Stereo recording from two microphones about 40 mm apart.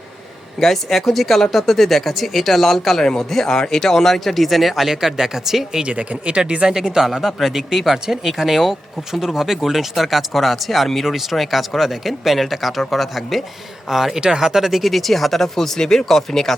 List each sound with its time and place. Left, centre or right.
0.6 s speech: centre
5.8 s speech: right
6.7 s speech: centre
7.0 s speech: centre